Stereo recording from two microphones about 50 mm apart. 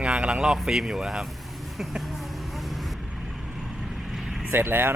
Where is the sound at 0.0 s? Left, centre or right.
Right.